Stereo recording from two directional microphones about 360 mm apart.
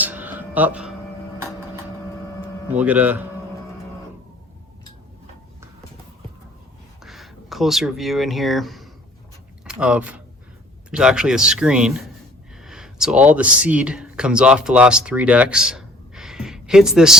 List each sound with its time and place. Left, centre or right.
0.0 s a sound: centre
2.7 s speech: centre
7.0 s speech: centre